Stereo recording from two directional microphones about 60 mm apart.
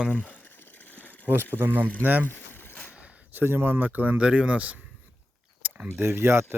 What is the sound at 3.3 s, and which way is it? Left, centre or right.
Speech, right.